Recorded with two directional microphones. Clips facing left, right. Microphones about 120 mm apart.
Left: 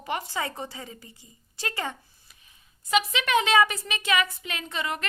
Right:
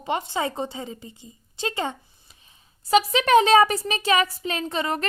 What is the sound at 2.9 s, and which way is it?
Speech, 35° right (ahead or behind).